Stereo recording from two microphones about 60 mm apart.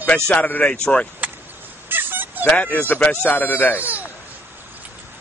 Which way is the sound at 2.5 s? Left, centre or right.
Left.